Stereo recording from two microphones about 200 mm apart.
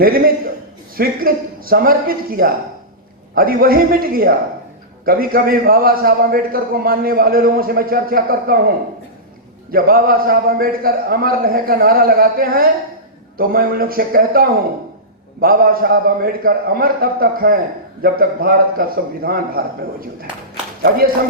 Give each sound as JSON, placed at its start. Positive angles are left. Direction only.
{"t": 0.0, "sound": "a man's voice", "side_deg": -45}
{"t": 9.7, "sound": "a man's voice", "side_deg": -45}